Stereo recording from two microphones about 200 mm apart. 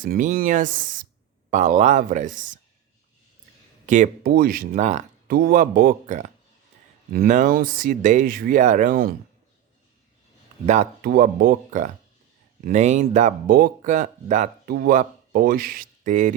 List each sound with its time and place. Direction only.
0.0 s speech: 45° right (ahead or behind)
3.8 s speech: 40° right (ahead or behind)
5.3 s speech: 45° right (ahead or behind)
11.0 s speech: 50° right (ahead or behind)